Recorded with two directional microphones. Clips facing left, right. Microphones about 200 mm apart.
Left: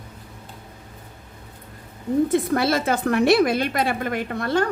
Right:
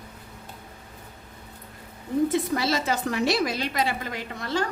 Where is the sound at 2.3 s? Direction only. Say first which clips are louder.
Left 5 dB; 55° left (ahead or behind).